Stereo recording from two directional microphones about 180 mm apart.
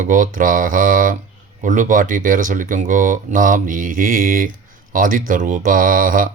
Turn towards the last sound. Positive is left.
turn(degrees=-50)  # may be behind; listen again after turning